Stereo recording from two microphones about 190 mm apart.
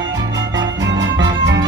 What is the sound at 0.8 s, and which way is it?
Music, 75° right (ahead or behind).